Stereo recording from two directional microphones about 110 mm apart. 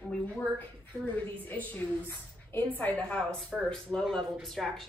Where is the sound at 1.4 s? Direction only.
15° left (ahead or behind).